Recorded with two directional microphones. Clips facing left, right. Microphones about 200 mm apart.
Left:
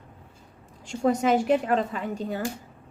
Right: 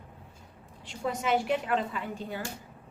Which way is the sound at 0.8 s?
45° left (ahead or behind).